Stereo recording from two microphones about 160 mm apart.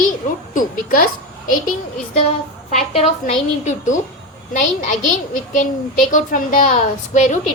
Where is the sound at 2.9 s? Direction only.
40° left (ahead or behind).